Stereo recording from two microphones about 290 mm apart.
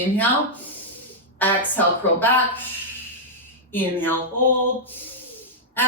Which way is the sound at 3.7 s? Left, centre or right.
Centre.